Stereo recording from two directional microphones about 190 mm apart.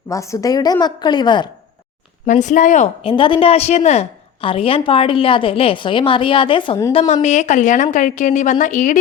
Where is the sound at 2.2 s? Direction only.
40° left (ahead or behind).